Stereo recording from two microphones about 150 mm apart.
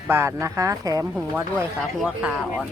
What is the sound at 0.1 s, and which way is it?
Speech, 20° right (ahead or behind).